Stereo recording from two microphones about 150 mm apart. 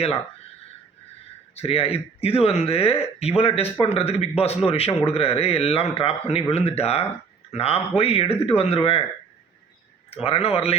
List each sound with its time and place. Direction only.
1.5 s speech: 40° left (ahead or behind)
10.1 s speech: 40° left (ahead or behind)